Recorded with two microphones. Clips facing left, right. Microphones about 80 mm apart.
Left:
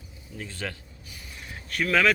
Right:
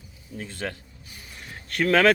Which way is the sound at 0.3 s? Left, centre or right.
Right.